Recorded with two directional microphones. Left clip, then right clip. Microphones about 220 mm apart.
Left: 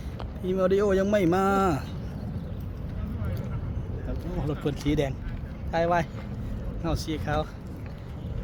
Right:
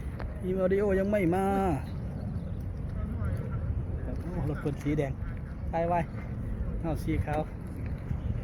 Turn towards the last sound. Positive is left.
turn(degrees=15)  # may be behind; listen again after turning